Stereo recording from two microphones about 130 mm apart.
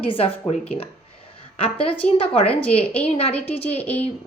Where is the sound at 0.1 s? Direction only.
45° left (ahead or behind).